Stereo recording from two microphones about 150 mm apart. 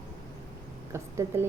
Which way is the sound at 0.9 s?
20° right (ahead or behind).